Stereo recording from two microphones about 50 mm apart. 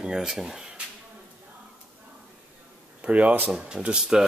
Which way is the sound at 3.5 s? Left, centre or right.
Centre.